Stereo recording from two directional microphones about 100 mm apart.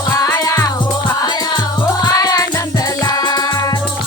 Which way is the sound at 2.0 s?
40° left (ahead or behind).